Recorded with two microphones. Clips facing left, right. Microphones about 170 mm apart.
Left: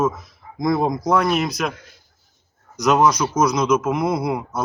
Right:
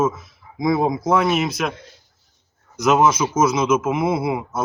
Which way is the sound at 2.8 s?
5° right (ahead or behind).